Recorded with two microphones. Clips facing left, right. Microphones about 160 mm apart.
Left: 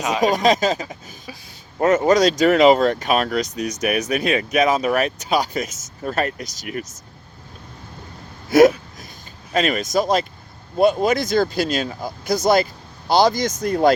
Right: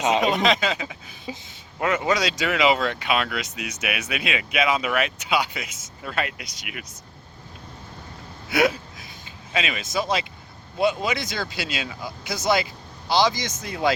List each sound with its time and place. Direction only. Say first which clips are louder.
0.2 s speech: left 4 dB; 40° left (ahead or behind)
8.4 s a sound: left 9 dB; 40° left (ahead or behind)
9.5 s speech: left 8 dB; 45° left (ahead or behind)